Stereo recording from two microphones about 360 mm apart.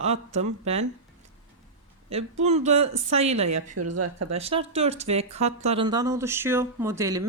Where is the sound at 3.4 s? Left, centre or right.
Right.